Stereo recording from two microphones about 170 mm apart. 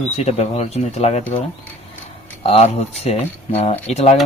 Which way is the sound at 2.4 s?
35° left (ahead or behind).